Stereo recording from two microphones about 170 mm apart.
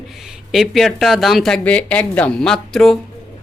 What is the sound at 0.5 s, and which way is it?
Speech, centre (ahead or behind).